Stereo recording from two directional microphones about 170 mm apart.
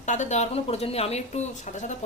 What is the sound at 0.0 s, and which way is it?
A woman's voice, 45° left (ahead or behind).